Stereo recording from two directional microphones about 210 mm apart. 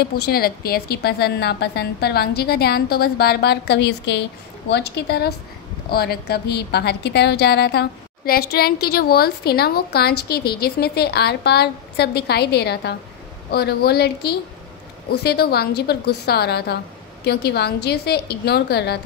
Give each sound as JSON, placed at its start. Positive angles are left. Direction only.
{"t": 0.0, "sound": "a woman's voice", "side_deg": 45}